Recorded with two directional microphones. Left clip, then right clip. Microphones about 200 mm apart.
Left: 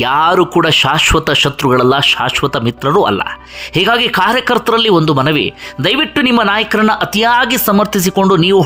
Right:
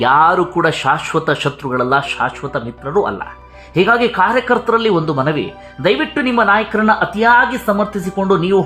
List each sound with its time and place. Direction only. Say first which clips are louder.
0.0 s speech: left 1 dB; 25° left (ahead or behind)